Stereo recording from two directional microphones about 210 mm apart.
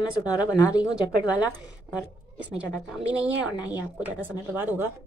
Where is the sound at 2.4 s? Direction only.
5° right (ahead or behind).